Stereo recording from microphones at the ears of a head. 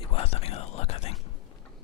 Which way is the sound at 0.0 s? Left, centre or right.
Left.